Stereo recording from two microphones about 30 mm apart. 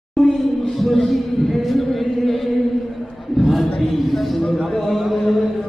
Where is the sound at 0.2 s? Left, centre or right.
Centre.